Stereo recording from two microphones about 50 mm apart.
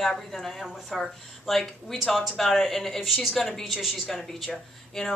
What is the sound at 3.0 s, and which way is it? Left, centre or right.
Speech, centre.